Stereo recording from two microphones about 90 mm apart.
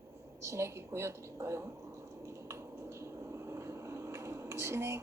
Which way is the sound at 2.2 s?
30° right (ahead or behind).